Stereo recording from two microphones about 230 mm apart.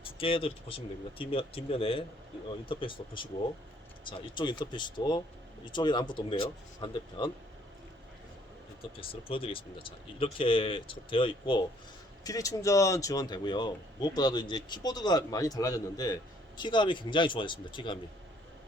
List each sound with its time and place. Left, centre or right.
0.0 s speech: left
4.4 s speech: centre
9.0 s speech: left